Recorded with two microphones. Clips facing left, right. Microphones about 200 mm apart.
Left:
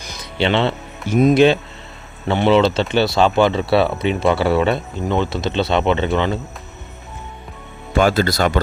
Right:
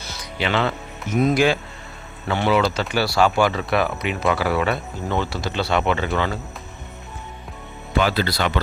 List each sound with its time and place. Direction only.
0.3 s speech: 25° left (ahead or behind)
7.9 s speech: 45° left (ahead or behind)